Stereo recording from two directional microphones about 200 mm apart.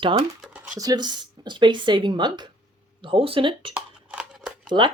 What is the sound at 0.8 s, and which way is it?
Speech, 20° right (ahead or behind).